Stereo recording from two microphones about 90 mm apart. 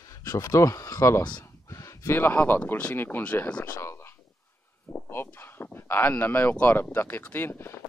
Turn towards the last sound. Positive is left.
turn(degrees=25)  # may be behind; listen again after turning